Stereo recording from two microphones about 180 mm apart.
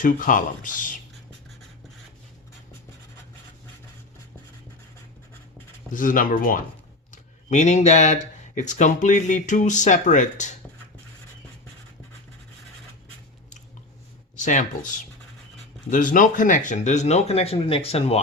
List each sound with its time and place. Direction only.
0.0 s speech: 50° left (ahead or behind)
5.9 s speech: 50° left (ahead or behind)
7.1 s speech: 40° left (ahead or behind)
14.3 s speech: 45° left (ahead or behind)